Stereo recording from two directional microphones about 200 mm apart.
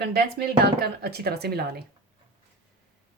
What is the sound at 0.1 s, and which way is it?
Speech, 55° right (ahead or behind).